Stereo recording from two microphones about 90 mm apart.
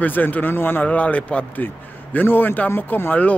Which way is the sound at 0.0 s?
20° left (ahead or behind).